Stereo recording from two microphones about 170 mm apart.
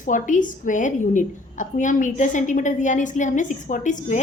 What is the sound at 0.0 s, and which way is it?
A woman's voice, 50° left (ahead or behind).